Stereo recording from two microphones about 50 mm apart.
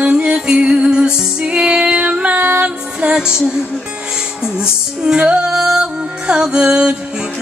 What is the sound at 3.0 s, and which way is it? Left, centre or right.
Music, centre.